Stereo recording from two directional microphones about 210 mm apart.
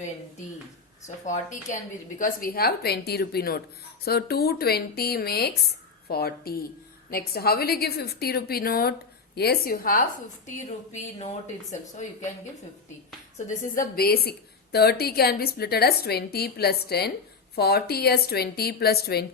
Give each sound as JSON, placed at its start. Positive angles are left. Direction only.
{"t": 1.0, "sound": "a woman's voice", "side_deg": 35}
{"t": 11.7, "sound": "speech", "side_deg": 35}
{"t": 13.5, "sound": "a woman's voice", "side_deg": 40}